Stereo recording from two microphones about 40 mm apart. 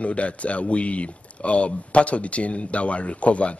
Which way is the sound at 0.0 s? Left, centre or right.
Left.